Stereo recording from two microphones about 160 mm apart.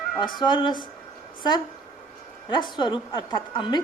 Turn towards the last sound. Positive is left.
turn(degrees=30)  # may be behind; listen again after turning